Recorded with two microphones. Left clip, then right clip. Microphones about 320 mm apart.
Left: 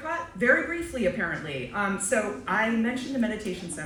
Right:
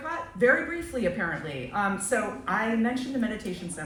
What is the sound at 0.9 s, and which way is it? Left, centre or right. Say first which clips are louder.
Speech: even; centre.